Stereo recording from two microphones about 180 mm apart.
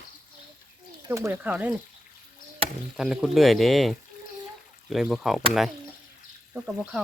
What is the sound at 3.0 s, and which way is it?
Speech, 5° right (ahead or behind).